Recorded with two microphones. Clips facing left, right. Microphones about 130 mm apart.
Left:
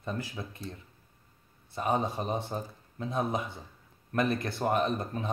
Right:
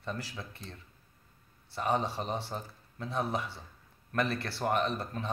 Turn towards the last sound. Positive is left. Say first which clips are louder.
# left 3 dB
turn(degrees=20)  # may be behind; listen again after turning